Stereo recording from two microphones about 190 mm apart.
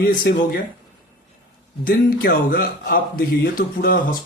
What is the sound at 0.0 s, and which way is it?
Speech, 50° left (ahead or behind).